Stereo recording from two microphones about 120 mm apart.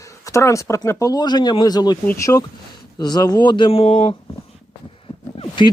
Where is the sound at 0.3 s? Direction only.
25° left (ahead or behind); by 4.1 s 50° left (ahead or behind).